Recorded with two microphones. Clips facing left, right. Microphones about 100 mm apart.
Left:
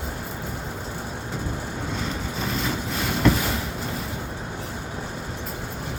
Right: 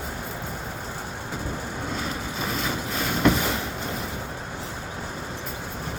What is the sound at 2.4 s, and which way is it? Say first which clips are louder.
Vehicle: left 1 dB; 5° right (ahead or behind).